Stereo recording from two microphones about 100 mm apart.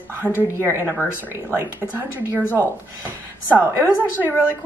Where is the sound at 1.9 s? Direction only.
20° right (ahead or behind).